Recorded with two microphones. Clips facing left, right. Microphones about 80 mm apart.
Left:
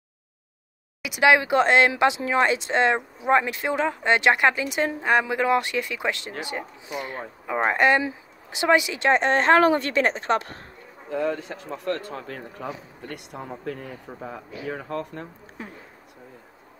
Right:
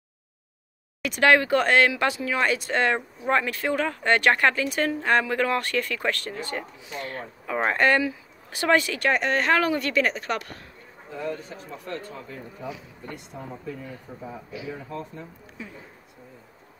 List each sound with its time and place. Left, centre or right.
1.0 s speech: centre; by 10.6 s left
11.1 s speech: left
13.1 s speech: left
14.5 s speech: left
14.9 s speech: left
15.6 s speech: left